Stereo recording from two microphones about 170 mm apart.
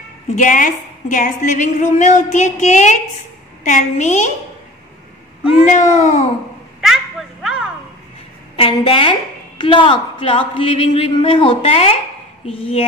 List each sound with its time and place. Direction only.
0.4 s a woman's voice: 50° left (ahead or behind)
5.7 s a woman's voice: 45° left (ahead or behind)
6.8 s a sound: centre (ahead or behind)
8.5 s speech: 35° left (ahead or behind)